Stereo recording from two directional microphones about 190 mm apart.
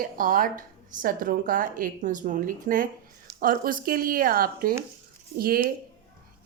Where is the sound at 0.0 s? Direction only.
45° right (ahead or behind).